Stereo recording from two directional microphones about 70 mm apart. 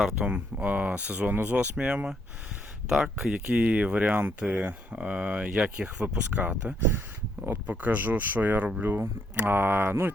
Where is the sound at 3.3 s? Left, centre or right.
Centre.